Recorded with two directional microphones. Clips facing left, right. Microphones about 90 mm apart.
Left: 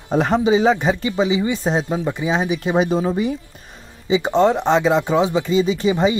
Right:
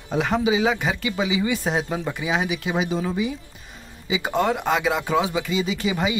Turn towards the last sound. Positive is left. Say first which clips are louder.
# left 6 dB
turn(degrees=30)  # may be behind; listen again after turning